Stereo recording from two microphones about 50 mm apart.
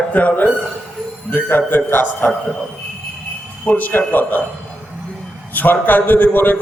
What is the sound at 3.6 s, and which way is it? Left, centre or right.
Speech, left.